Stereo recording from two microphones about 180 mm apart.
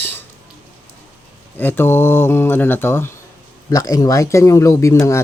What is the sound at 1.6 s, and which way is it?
Speech, 10° left (ahead or behind).